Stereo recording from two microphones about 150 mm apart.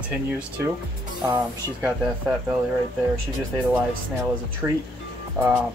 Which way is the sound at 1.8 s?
5° right (ahead or behind).